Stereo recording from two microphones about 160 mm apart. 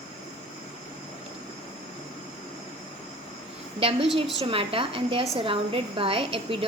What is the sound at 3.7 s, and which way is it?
A woman's voice, 35° right (ahead or behind).